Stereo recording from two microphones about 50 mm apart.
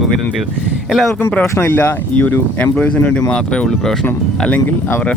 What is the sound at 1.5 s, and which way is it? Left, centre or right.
Speech, left.